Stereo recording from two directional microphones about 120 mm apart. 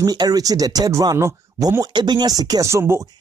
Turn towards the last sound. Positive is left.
turn(degrees=-20)  # may be behind; listen again after turning